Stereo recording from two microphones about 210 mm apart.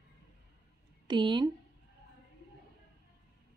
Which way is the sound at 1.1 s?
20° right (ahead or behind).